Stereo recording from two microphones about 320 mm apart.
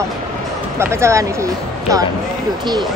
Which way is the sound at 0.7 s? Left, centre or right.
Centre.